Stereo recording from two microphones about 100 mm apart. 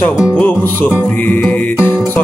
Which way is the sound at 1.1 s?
15° left (ahead or behind).